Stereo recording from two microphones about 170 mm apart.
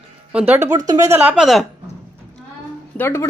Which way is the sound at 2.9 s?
15° left (ahead or behind).